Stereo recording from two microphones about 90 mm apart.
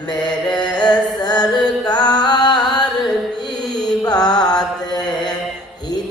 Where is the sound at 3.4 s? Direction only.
50° left (ahead or behind).